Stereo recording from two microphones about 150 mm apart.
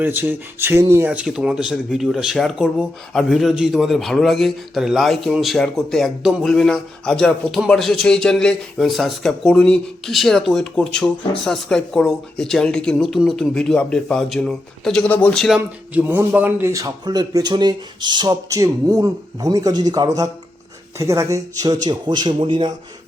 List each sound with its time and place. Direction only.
0.0 s speech: 15° right (ahead or behind); by 22.7 s 35° right (ahead or behind)